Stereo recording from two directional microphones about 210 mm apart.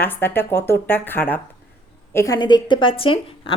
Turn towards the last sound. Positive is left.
turn(degrees=25)  # may be behind; listen again after turning